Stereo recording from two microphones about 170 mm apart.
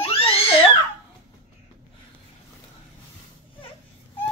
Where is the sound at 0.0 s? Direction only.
35° left (ahead or behind).